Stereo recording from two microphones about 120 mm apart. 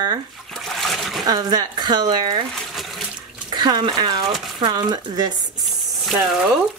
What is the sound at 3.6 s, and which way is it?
Speech, 40° right (ahead or behind).